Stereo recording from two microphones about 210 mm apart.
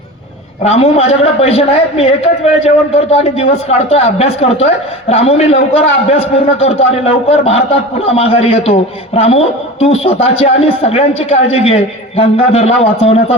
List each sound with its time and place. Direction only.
0.6 s a woman's voice: 30° left (ahead or behind)